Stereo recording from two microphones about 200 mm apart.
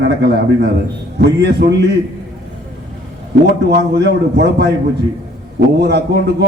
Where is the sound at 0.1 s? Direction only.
55° right (ahead or behind).